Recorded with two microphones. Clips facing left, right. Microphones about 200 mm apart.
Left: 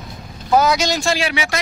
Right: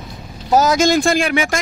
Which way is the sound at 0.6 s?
45° right (ahead or behind).